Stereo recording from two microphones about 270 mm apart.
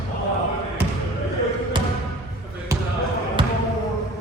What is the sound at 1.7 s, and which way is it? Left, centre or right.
Music, centre.